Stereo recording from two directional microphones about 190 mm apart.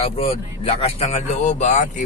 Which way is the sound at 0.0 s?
30° left (ahead or behind).